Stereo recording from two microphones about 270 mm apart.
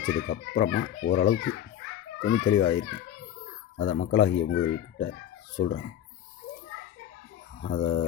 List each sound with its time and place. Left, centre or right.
0.0 s a child's voice: left
7.6 s a child's voice: left